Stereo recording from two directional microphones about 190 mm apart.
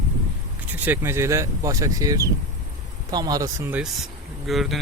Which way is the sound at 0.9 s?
15° right (ahead or behind).